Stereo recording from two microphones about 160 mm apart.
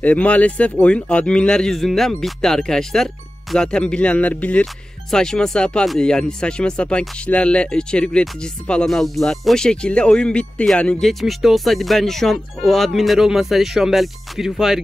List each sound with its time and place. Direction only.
0.0 s speech: 10° left (ahead or behind)